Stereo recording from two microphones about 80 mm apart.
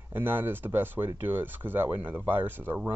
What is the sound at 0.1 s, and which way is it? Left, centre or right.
Speech, right.